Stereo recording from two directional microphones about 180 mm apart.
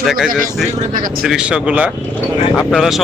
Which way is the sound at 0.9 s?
50° right (ahead or behind).